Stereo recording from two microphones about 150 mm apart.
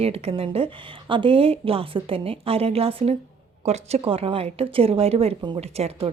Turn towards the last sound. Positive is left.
turn(degrees=-45)  # may be behind; listen again after turning